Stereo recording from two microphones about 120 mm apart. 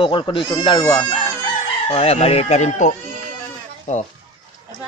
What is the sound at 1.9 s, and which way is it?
Speech, 55° left (ahead or behind).